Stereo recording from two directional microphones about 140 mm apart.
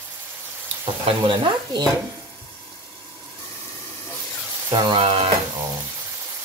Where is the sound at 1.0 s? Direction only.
40° right (ahead or behind).